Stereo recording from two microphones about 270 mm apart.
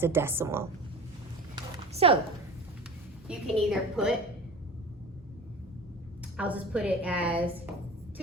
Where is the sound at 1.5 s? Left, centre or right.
Right.